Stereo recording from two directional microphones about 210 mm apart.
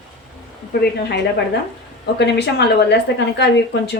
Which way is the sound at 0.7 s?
50° left (ahead or behind).